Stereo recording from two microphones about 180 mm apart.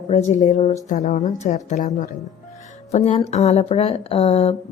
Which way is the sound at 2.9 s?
35° left (ahead or behind).